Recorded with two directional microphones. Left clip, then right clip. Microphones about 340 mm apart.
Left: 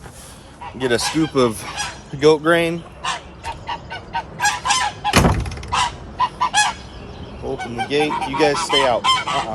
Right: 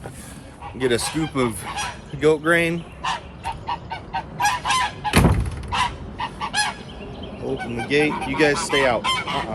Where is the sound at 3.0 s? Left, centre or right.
Centre.